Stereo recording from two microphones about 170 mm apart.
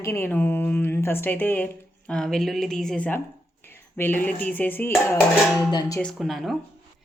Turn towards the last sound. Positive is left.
turn(degrees=0)  # may be behind; listen again after turning